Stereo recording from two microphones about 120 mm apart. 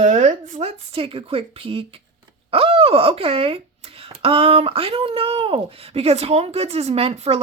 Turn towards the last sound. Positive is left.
turn(degrees=-55)  # may be behind; listen again after turning